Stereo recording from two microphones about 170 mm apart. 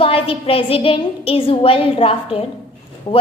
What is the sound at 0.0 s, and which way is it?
A child's voice, 35° left (ahead or behind).